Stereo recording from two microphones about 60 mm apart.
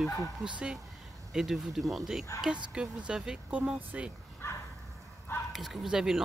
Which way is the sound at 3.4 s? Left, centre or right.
Right.